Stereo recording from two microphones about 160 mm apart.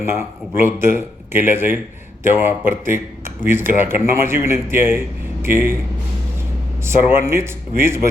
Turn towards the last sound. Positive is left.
turn(degrees=-15)  # may be behind; listen again after turning